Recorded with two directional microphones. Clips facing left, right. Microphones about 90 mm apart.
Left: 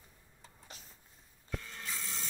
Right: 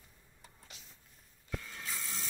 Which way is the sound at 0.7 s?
40° left (ahead or behind).